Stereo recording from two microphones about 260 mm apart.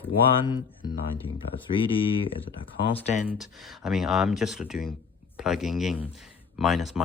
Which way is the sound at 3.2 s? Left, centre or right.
Centre.